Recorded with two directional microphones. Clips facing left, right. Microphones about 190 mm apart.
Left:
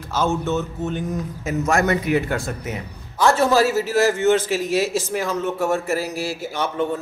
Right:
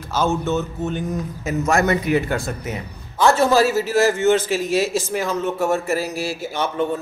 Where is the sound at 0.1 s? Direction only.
35° right (ahead or behind).